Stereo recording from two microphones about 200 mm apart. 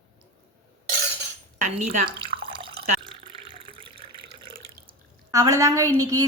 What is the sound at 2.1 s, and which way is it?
Water, 25° right (ahead or behind).